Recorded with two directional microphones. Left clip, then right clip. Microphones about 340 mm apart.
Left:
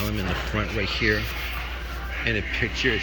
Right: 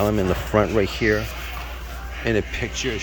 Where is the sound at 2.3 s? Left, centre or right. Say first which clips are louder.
Right 4 dB; centre.